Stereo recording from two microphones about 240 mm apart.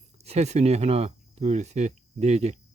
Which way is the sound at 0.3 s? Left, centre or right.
Right.